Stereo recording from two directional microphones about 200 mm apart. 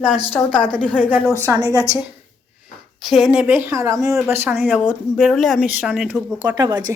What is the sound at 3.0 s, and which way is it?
A woman's voice, centre (ahead or behind).